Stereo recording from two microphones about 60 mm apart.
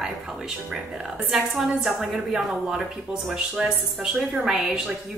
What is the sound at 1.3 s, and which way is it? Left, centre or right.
A woman's voice, centre.